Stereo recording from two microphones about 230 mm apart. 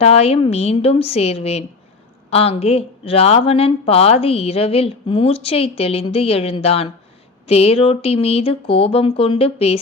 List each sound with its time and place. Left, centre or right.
0.0 s a woman's voice: left